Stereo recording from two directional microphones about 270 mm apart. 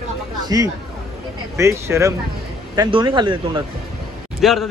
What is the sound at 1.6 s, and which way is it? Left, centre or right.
Speech, centre.